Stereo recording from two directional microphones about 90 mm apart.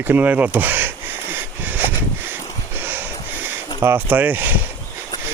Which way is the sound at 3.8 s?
20° right (ahead or behind).